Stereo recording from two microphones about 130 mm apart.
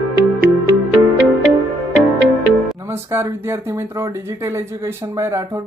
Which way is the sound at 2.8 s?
20° right (ahead or behind).